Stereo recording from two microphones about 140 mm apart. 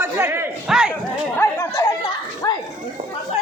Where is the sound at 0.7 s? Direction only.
5° right (ahead or behind).